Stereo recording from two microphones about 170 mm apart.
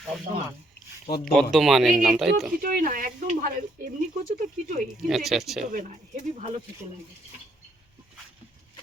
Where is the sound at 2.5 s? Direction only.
55° right (ahead or behind).